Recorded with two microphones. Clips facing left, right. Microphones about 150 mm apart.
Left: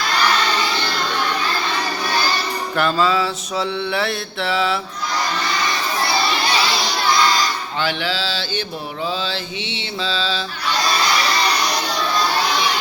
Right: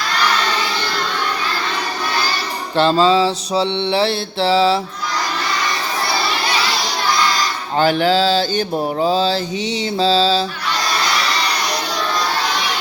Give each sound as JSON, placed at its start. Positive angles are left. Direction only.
{"t": 2.7, "sound": "mantra", "side_deg": -30}
{"t": 7.8, "sound": "mantra", "side_deg": -45}